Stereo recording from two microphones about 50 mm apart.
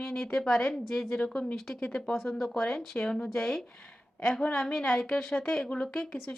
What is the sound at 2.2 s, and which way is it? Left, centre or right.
A woman's voice, centre.